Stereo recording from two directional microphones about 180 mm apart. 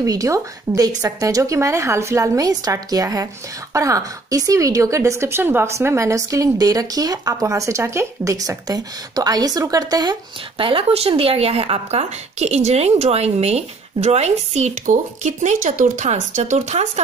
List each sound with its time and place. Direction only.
0.0 s a woman's voice: 20° right (ahead or behind)
10.6 s speech: 30° right (ahead or behind)